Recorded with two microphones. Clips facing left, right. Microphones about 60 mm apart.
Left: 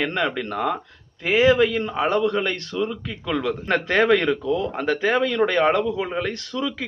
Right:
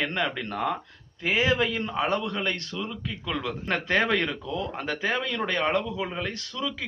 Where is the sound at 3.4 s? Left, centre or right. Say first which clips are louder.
Left 7 dB; left.